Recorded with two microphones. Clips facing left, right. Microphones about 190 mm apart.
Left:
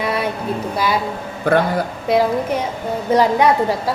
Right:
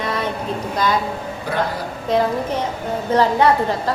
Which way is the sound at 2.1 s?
10° left (ahead or behind).